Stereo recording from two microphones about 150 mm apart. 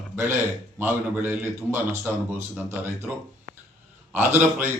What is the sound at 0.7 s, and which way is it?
A man's voice, 15° right (ahead or behind).